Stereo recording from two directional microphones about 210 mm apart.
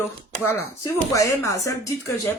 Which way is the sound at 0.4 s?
15° left (ahead or behind).